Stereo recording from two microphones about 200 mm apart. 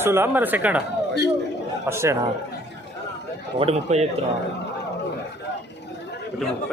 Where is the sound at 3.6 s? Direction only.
35° right (ahead or behind).